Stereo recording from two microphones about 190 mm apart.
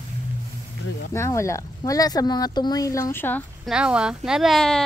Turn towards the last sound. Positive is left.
turn(degrees=0)  # may be behind; listen again after turning